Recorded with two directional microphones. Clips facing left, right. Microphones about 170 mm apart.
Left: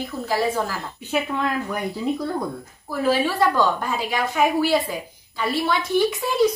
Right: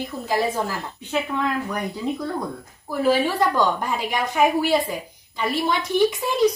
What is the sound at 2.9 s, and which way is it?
Speech, 15° right (ahead or behind).